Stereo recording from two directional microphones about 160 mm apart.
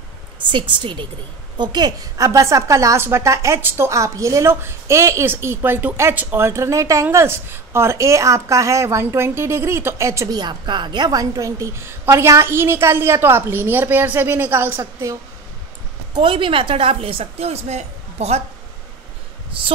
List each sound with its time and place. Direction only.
0.5 s a woman's voice: 30° right (ahead or behind)
16.2 s a woman's voice: 30° right (ahead or behind)
19.6 s a woman's voice: 35° right (ahead or behind)